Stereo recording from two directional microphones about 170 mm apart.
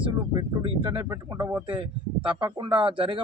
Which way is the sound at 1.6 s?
30° right (ahead or behind).